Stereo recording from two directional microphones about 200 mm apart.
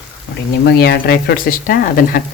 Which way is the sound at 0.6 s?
55° left (ahead or behind).